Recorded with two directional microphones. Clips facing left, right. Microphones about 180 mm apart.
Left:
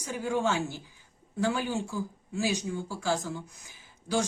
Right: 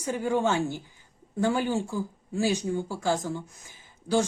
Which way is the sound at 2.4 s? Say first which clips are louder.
Right 4 dB; 50° right (ahead or behind).